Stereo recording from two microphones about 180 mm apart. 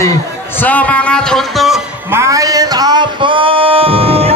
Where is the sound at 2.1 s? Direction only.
15° right (ahead or behind); by 4.3 s 35° right (ahead or behind).